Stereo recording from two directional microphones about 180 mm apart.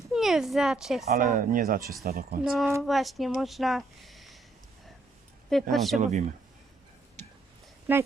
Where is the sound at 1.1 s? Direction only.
50° right (ahead or behind).